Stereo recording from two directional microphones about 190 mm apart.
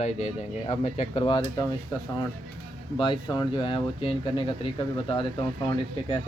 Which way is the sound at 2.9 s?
25° left (ahead or behind).